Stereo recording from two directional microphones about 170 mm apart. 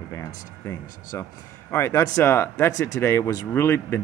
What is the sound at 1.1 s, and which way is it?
Speech, 15° left (ahead or behind).